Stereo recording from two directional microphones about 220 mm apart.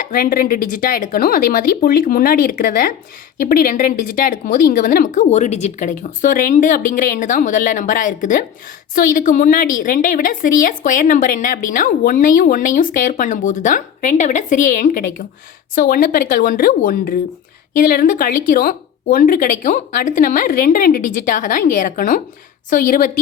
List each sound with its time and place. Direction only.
0.0 s speech: 40° left (ahead or behind)